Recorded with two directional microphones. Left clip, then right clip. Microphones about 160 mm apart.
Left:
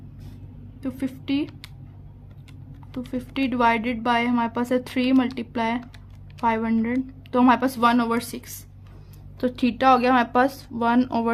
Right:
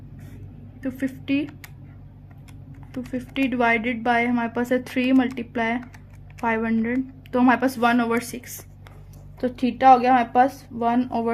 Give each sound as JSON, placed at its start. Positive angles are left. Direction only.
{"t": 0.8, "sound": "a woman's voice", "side_deg": 25}
{"t": 3.1, "sound": "a woman's voice", "side_deg": 30}
{"t": 6.4, "sound": "a woman's voice", "side_deg": 25}
{"t": 9.4, "sound": "speech", "side_deg": 45}